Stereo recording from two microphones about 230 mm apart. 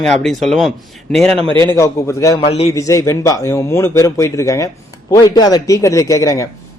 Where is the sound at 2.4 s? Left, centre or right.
Left.